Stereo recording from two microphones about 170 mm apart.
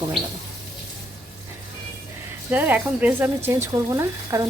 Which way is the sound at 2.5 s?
10° right (ahead or behind).